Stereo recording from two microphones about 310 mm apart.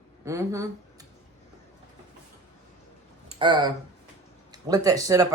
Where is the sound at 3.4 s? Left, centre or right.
Centre.